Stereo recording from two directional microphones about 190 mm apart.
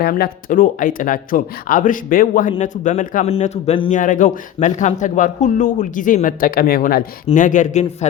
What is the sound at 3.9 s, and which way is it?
Speech, 45° left (ahead or behind).